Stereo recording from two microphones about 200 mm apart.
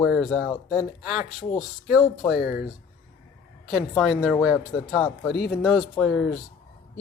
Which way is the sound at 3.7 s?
Centre (ahead or behind).